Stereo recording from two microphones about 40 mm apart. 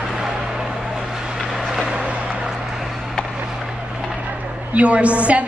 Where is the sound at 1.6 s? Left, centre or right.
Centre.